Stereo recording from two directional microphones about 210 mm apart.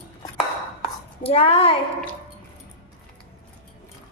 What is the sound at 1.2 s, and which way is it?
Speech, 30° left (ahead or behind).